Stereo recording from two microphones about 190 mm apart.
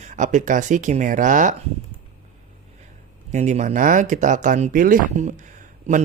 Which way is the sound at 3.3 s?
40° right (ahead or behind).